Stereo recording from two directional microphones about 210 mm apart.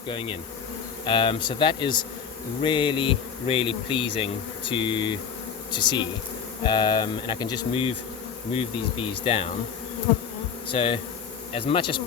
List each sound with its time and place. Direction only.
0.1 s bee: 25° left (ahead or behind)
10.7 s bee: 25° left (ahead or behind)